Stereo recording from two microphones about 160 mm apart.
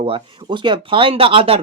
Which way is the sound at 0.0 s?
30° right (ahead or behind).